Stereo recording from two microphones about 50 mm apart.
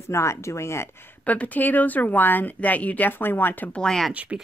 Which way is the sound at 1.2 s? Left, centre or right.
Left.